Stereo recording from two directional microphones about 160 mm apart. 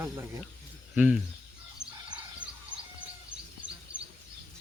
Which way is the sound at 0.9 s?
5° right (ahead or behind).